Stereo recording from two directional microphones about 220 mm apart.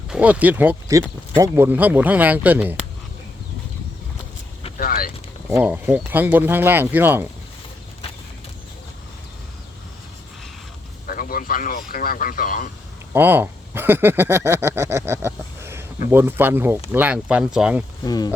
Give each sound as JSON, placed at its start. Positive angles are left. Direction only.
{"t": 0.1, "sound": "speech", "side_deg": -5}
{"t": 4.8, "sound": "boat", "side_deg": 40}
{"t": 5.5, "sound": "speech", "side_deg": -10}
{"t": 11.0, "sound": "a man's voice", "side_deg": 40}
{"t": 13.1, "sound": "speech", "side_deg": -10}
{"t": 18.0, "sound": "speech", "side_deg": 20}